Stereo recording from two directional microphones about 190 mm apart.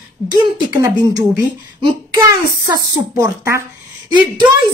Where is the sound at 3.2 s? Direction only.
15° right (ahead or behind).